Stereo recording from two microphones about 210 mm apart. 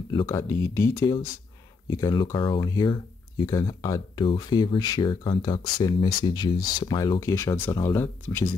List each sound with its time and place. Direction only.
0.1 s speech: 20° left (ahead or behind)